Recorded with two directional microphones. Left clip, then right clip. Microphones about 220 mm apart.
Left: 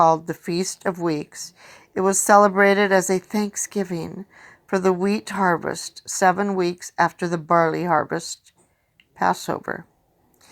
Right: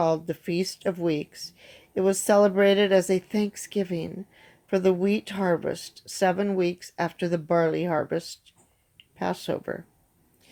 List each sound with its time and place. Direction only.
0.0 s speech: 15° left (ahead or behind)